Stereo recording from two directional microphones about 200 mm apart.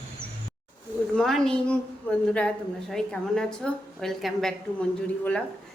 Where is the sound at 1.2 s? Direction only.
Centre (ahead or behind).